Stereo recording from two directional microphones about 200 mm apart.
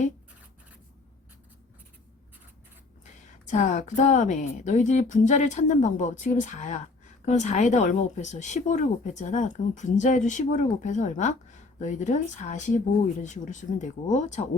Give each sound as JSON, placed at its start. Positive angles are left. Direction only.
{"t": 3.0, "sound": "speech", "side_deg": 35}